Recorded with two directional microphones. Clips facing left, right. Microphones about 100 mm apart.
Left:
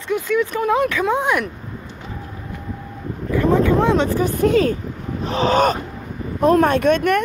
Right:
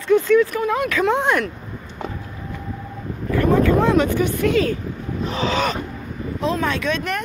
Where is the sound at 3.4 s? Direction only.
20° left (ahead or behind); by 5.7 s 45° left (ahead or behind).